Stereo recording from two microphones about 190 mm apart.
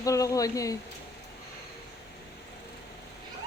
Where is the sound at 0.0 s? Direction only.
15° left (ahead or behind).